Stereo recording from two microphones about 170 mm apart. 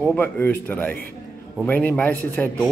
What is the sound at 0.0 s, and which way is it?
A man's voice, 10° left (ahead or behind).